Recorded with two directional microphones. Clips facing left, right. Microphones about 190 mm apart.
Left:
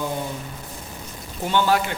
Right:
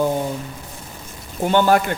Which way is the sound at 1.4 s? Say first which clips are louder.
Right 5 dB; 50° right (ahead or behind).